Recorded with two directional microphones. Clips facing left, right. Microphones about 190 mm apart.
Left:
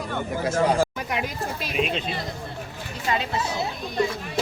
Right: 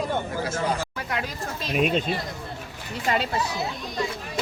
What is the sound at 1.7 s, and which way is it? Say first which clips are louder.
Speech: right 4 dB; 45° right (ahead or behind).